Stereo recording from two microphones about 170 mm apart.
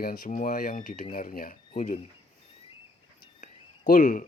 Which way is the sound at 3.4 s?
50° left (ahead or behind).